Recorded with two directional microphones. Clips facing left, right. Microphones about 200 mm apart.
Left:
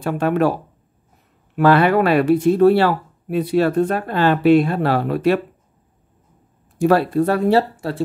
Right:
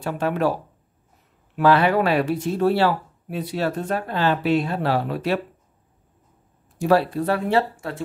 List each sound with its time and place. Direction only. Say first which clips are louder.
0.0 s speech: left 5 dB; 60° left (ahead or behind)
1.6 s speech: left 3 dB; 55° left (ahead or behind)
6.8 s speech: left 4 dB; 55° left (ahead or behind); by 8.0 s 35° left (ahead or behind)